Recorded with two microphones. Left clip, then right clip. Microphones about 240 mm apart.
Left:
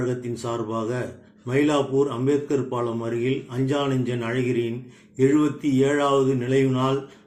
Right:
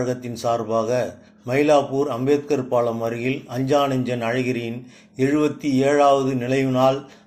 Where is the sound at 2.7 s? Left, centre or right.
Centre.